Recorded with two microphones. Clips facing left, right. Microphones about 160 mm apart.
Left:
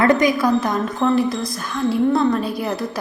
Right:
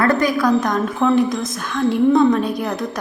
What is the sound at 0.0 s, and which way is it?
A woman's voice, 15° left (ahead or behind).